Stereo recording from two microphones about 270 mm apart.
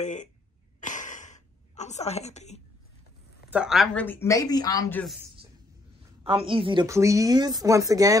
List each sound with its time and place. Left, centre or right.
0.0 s speech: left
0.7 s a sound: left
3.4 s speech: centre
6.2 s speech: centre